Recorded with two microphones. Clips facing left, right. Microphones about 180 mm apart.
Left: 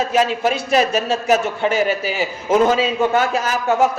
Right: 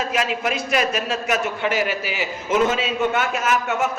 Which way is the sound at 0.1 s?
30° left (ahead or behind).